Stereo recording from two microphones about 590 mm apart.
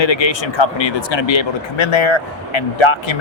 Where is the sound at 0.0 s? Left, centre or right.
Left.